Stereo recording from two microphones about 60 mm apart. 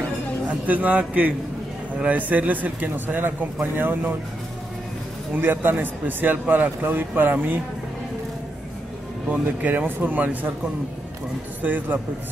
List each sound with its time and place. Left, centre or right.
0.5 s a man's voice: right
5.3 s speech: right
9.3 s a man's voice: right
11.6 s a man's voice: right